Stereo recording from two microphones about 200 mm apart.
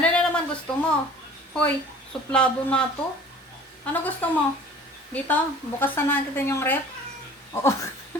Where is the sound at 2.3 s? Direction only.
5° left (ahead or behind).